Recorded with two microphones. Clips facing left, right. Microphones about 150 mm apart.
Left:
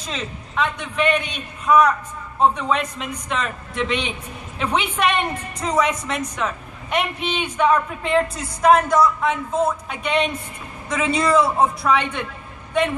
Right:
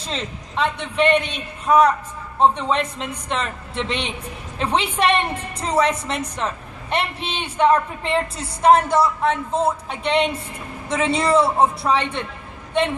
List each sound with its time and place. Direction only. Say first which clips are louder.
0.0 s a man's voice: right 1 dB; 30° right (ahead or behind)